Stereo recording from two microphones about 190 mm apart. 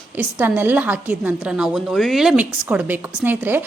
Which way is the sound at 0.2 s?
10° right (ahead or behind).